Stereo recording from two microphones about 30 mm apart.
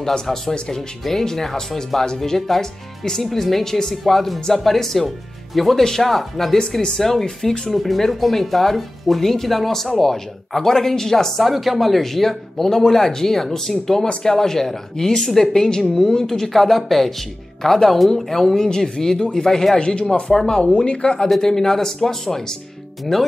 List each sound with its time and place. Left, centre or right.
0.0 s speech: centre
11.4 s speech: centre
18.6 s speech: left
19.8 s a woman's voice: left
20.6 s a woman's voice: left
21.4 s speech: centre
23.1 s speech: centre